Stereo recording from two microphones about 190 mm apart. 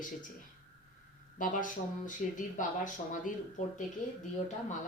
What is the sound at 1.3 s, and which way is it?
Speech, 45° left (ahead or behind).